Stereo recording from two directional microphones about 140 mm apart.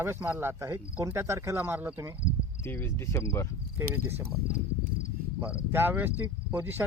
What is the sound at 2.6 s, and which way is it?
Cricket, 15° left (ahead or behind).